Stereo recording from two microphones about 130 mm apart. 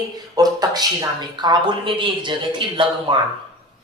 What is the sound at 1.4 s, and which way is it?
Speech, 40° right (ahead or behind).